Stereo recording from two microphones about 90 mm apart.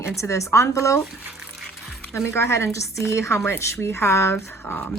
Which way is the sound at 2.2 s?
30° left (ahead or behind).